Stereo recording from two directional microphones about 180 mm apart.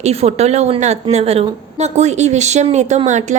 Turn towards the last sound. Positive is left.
turn(degrees=-40)  # may be behind; listen again after turning